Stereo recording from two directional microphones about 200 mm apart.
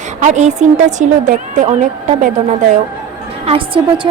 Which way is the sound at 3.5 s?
25° right (ahead or behind).